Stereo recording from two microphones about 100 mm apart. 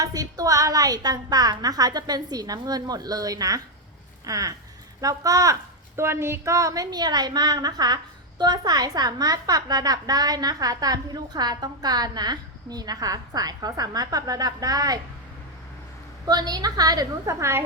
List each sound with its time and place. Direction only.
0.0 s a woman's voice: 35° right (ahead or behind)
16.2 s a woman's voice: 40° right (ahead or behind)